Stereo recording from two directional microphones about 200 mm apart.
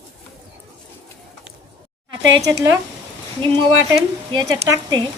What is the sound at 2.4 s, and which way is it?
Speech, 15° right (ahead or behind).